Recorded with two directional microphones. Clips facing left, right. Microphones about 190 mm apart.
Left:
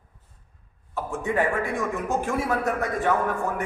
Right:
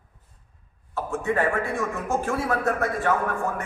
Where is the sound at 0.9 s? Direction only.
15° left (ahead or behind).